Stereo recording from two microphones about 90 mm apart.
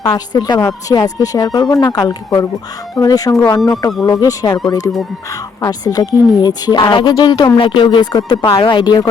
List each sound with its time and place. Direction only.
0.0 s a woman's voice: 50° left (ahead or behind)
7.6 s a woman's voice: 70° left (ahead or behind); by 9.0 s 50° left (ahead or behind)